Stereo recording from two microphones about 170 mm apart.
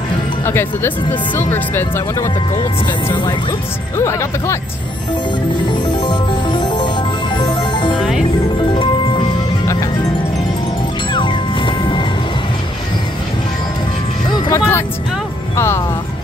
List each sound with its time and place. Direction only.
0.5 s speech: 10° left (ahead or behind)
3.9 s speech: 15° left (ahead or behind)
5.6 s music: 30° left (ahead or behind)
11.1 s music: 30° left (ahead or behind)
14.3 s music: 15° left (ahead or behind)
15.5 s speech: 15° left (ahead or behind)